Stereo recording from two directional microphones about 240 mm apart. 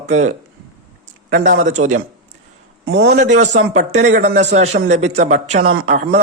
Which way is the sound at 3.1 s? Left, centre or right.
Right.